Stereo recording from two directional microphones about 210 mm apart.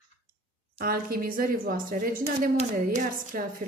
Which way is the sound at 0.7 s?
45° right (ahead or behind).